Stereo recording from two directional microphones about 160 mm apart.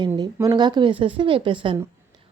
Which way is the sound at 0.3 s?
25° right (ahead or behind).